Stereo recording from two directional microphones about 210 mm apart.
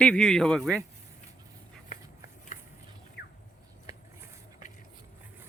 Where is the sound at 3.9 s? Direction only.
15° right (ahead or behind).